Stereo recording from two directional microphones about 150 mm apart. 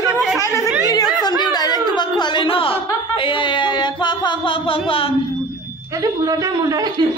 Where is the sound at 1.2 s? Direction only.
30° left (ahead or behind).